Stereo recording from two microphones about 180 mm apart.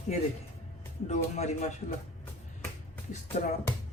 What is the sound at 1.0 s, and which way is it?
Speech, 40° left (ahead or behind).